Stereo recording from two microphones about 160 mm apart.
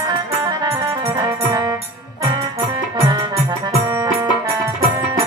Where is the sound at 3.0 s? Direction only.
30° right (ahead or behind).